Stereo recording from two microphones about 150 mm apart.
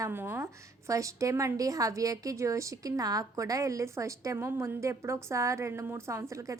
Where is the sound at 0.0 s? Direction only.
15° right (ahead or behind).